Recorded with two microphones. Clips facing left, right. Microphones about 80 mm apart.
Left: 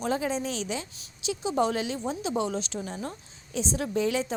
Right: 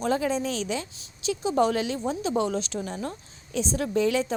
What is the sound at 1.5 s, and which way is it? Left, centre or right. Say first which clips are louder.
Speech: right 3 dB; right.